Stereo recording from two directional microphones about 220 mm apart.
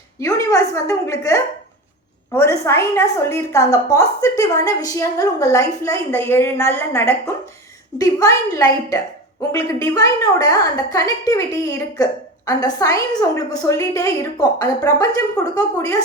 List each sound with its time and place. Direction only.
0.2 s a woman's voice: 15° left (ahead or behind)